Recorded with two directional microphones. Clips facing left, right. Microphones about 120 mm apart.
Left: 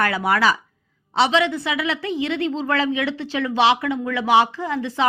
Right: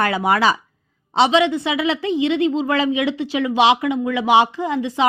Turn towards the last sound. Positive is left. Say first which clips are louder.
# right 3 dB
turn(degrees=-15)  # may be behind; listen again after turning